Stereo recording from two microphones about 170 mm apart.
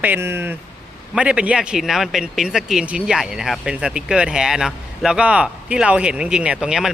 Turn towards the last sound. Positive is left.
turn(degrees=-5)  # may be behind; listen again after turning